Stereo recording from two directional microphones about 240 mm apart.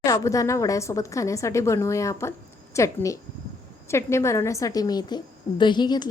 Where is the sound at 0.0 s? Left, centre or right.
Centre.